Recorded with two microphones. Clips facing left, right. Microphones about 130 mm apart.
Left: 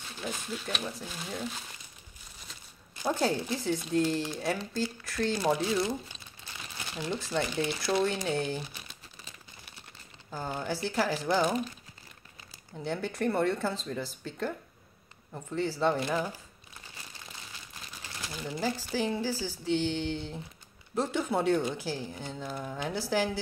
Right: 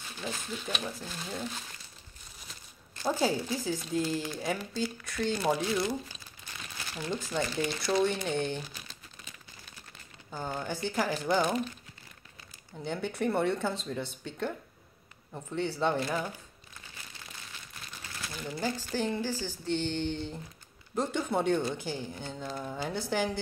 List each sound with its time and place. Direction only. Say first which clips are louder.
0.2 s speech: left 1 dB; 5° left (ahead or behind)
3.1 s speech: even; 5° right (ahead or behind)
6.8 s crumpling: left 1 dB; 20° left (ahead or behind)
7.5 s speech: right 1 dB; centre (ahead or behind)
10.3 s speech: left 1 dB; 5° left (ahead or behind)
12.7 s speech: left 1 dB; centre (ahead or behind)
18.2 s speech: left 1 dB; 15° left (ahead or behind)